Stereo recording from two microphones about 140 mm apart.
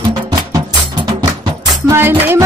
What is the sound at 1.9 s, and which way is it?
Music, 15° right (ahead or behind).